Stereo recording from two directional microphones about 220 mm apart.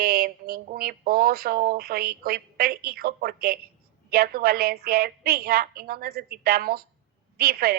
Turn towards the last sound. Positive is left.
turn(degrees=-45)  # may be behind; listen again after turning